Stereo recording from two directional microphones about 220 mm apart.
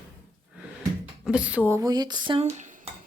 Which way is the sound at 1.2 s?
5° right (ahead or behind).